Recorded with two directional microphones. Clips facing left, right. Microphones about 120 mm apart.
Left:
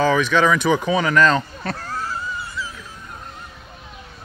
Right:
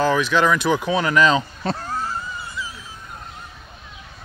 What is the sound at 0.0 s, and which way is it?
Speech, 5° right (ahead or behind).